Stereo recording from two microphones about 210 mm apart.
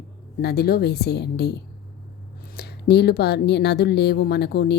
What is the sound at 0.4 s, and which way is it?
Speech, 50° left (ahead or behind).